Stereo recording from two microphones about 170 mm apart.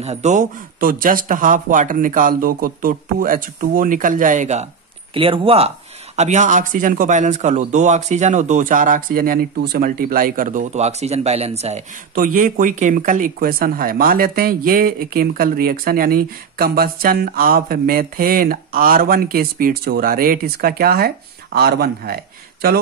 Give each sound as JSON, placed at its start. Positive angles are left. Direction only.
{"t": 0.0, "sound": "a man's voice", "side_deg": -40}
{"t": 5.1, "sound": "speech", "side_deg": -30}
{"t": 6.1, "sound": "a man's voice", "side_deg": -45}
{"t": 12.2, "sound": "speech", "side_deg": -55}